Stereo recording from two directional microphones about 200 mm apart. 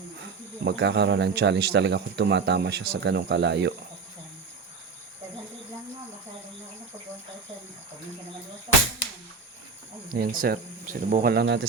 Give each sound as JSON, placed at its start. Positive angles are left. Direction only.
{"t": 0.6, "sound": "speech", "side_deg": -60}
{"t": 10.2, "sound": "speech", "side_deg": -50}